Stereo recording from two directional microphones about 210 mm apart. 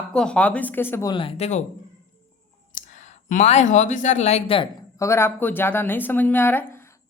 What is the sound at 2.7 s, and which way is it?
Speech, 35° left (ahead or behind).